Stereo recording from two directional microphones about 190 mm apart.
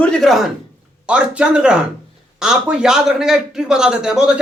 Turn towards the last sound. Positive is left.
turn(degrees=-5)  # may be behind; listen again after turning